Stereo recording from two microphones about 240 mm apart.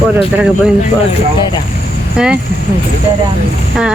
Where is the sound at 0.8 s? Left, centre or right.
Left.